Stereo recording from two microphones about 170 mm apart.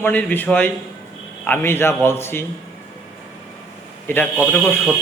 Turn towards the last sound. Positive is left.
turn(degrees=10)  # may be behind; listen again after turning